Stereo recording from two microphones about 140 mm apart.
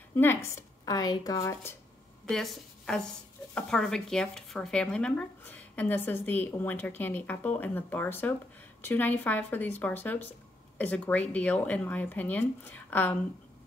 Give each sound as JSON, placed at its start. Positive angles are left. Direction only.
{"t": 0.1, "sound": "speech", "side_deg": 15}
{"t": 2.2, "sound": "a woman's voice", "side_deg": 0}